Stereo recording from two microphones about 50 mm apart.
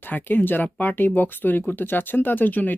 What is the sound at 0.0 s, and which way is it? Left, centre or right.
Speech, left.